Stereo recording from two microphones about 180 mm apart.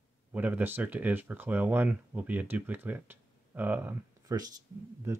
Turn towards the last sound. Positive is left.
turn(degrees=-15)  # may be behind; listen again after turning